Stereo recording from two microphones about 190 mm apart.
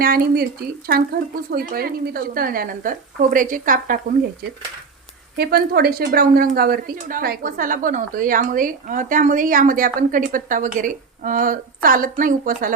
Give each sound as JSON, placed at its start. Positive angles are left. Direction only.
{"t": 0.0, "sound": "a woman's voice", "side_deg": -50}
{"t": 5.4, "sound": "a woman's voice", "side_deg": -55}